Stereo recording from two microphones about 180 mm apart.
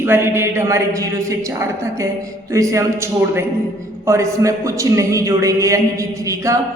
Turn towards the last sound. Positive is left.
turn(degrees=-15)  # may be behind; listen again after turning